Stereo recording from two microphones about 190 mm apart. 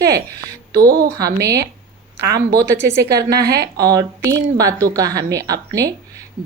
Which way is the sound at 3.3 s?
55° right (ahead or behind).